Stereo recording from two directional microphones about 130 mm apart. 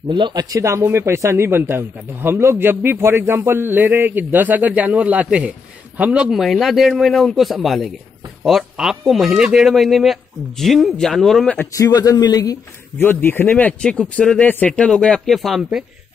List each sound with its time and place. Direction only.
0.1 s a man's voice: 35° right (ahead or behind); by 11.5 s centre (ahead or behind)
11.5 s speech: 20° left (ahead or behind)
13.0 s speech: 15° left (ahead or behind); by 15.8 s centre (ahead or behind)